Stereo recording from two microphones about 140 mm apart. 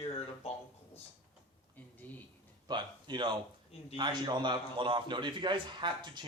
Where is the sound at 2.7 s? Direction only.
35° right (ahead or behind).